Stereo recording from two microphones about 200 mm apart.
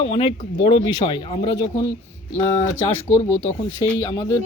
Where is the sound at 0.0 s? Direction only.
25° left (ahead or behind).